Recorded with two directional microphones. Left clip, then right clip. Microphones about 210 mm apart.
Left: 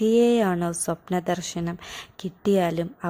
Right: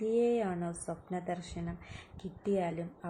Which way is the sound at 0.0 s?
40° left (ahead or behind).